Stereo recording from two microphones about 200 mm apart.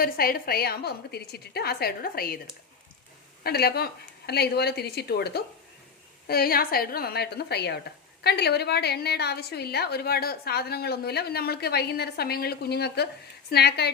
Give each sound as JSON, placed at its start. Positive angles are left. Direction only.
{"t": 0.0, "sound": "a woman's voice", "side_deg": 50}
{"t": 3.4, "sound": "a woman's voice", "side_deg": 50}